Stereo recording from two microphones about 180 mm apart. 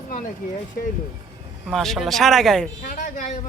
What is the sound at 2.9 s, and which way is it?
Speech, 45° left (ahead or behind).